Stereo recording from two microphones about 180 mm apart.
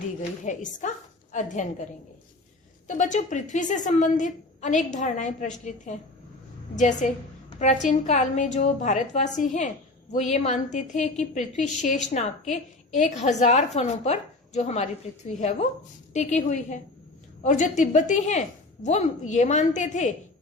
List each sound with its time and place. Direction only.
0.4 s a woman's voice: 45° left (ahead or behind)
2.8 s a woman's voice: 45° left (ahead or behind)